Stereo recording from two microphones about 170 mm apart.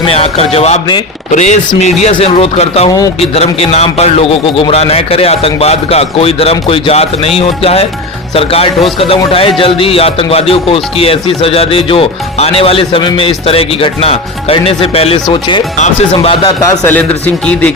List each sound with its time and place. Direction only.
0.0 s a man's voice: 35° left (ahead or behind)
16.8 s speech: 10° left (ahead or behind)